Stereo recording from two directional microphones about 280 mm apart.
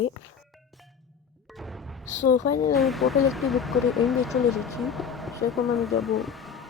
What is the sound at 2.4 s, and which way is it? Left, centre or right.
Speech, left.